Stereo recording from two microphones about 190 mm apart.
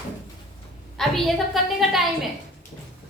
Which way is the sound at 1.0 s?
Centre (ahead or behind).